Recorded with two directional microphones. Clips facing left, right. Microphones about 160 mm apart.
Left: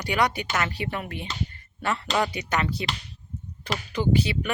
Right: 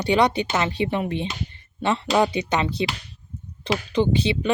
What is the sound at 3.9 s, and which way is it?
Speech, 25° right (ahead or behind).